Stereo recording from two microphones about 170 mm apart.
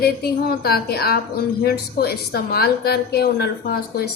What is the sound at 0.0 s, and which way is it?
A woman's voice, 65° left (ahead or behind).